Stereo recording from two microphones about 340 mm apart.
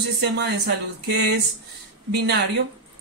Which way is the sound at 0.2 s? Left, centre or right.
Right.